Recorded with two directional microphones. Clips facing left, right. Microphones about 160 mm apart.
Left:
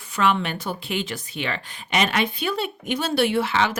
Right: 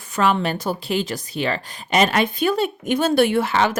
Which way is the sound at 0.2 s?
40° right (ahead or behind).